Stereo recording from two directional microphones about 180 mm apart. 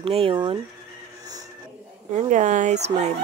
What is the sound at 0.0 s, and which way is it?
Speech, 30° right (ahead or behind).